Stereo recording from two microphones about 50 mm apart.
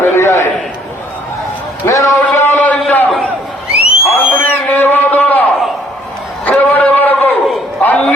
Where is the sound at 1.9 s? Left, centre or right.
Left.